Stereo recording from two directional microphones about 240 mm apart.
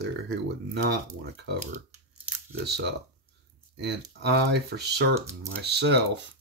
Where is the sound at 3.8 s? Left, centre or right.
Right.